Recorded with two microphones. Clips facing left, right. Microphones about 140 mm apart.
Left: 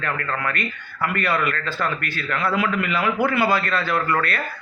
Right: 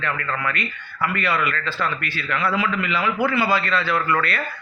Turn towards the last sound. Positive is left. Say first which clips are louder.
# right 1 dB
turn(degrees=45)  # may be behind; listen again after turning